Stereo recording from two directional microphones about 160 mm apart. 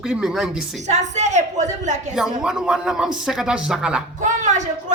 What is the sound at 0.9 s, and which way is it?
Speech, 45° right (ahead or behind).